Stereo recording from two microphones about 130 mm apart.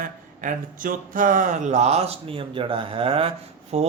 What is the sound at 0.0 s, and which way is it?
Speech, 90° right.